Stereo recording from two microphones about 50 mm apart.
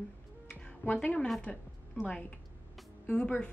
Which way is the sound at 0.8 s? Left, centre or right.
Left.